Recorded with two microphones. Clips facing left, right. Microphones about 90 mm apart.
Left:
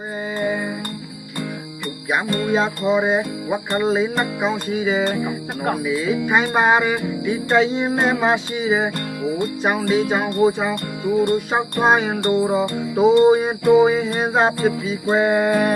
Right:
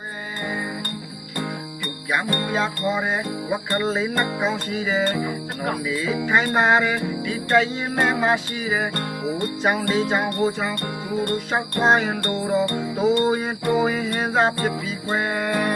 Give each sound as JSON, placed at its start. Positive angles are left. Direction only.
{"t": 2.1, "sound": "music", "side_deg": 20}